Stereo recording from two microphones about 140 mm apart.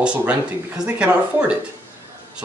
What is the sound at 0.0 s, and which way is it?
Speech, 10° right (ahead or behind).